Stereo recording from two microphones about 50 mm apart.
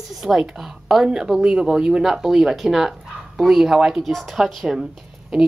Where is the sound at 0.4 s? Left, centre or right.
Centre.